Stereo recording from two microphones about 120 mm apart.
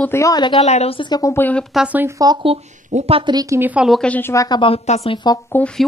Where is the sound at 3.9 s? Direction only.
5° left (ahead or behind).